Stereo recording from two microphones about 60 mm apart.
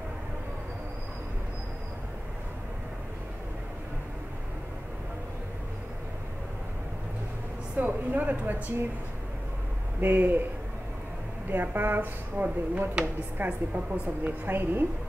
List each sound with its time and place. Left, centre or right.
7.7 s speech: right
9.9 s a woman's voice: right
11.5 s a woman's voice: right